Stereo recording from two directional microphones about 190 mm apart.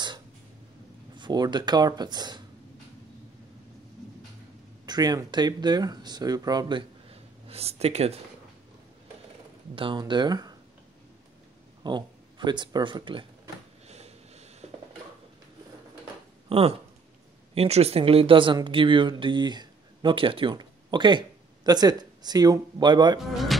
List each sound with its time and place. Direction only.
1.1 s speech: 20° right (ahead or behind)
4.8 s speech: 20° right (ahead or behind)
7.1 s a sound: 30° right (ahead or behind)
9.8 s speech: 25° right (ahead or behind)
11.8 s speech: 25° right (ahead or behind)
13.8 s a sound: 35° right (ahead or behind)
16.4 s a sound: 30° right (ahead or behind)
17.6 s speech: 35° right (ahead or behind)
23.3 s speech: centre (ahead or behind)